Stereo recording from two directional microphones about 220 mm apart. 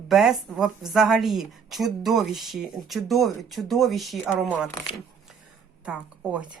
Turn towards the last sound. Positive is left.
turn(degrees=-5)  # may be behind; listen again after turning